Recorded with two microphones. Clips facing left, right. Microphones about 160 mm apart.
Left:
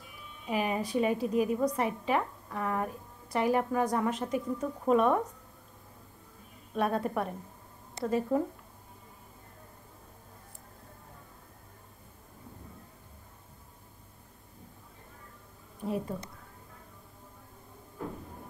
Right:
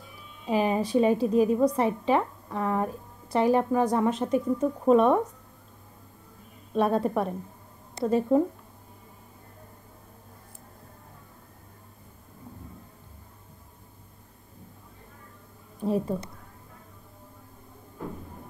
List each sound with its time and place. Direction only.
0.5 s a woman's voice: 30° right (ahead or behind)
6.7 s a woman's voice: 30° right (ahead or behind)
15.8 s a woman's voice: 30° right (ahead or behind)